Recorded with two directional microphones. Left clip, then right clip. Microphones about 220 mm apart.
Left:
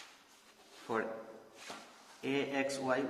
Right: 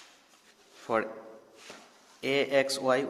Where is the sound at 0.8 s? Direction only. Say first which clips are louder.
Right 7 dB; 50° right (ahead or behind).